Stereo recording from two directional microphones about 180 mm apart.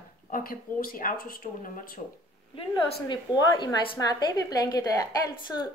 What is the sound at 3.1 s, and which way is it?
A woman's voice, 25° left (ahead or behind).